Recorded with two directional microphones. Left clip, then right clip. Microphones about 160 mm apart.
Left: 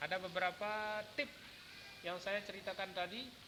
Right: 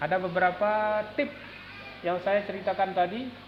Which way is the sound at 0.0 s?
30° left (ahead or behind).